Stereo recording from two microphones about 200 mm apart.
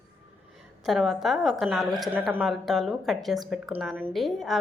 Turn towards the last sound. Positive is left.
turn(degrees=0)  # may be behind; listen again after turning